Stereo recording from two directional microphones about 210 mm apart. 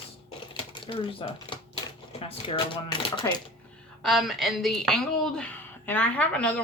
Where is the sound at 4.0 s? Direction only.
Centre (ahead or behind).